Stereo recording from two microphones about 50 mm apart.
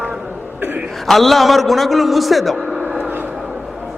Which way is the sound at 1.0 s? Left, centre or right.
Centre.